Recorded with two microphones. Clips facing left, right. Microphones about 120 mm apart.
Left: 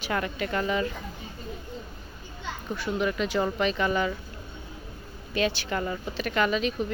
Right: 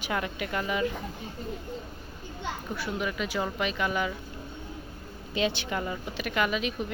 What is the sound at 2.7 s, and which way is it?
Speech, 5° right (ahead or behind).